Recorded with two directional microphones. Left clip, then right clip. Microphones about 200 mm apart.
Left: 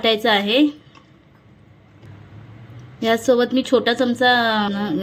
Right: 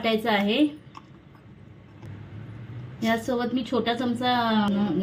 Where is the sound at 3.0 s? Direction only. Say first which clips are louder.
Left 9 dB; 50° left (ahead or behind).